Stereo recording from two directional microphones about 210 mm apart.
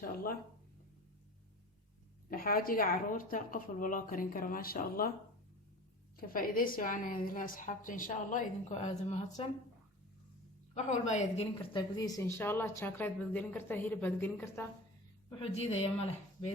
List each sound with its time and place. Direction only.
0.0 s speech: 45° left (ahead or behind)
2.3 s a woman's voice: 45° left (ahead or behind)
6.1 s a woman's voice: 45° left (ahead or behind)
10.8 s a woman's voice: 35° left (ahead or behind); by 14.7 s 10° left (ahead or behind)
15.4 s a woman's voice: 30° left (ahead or behind)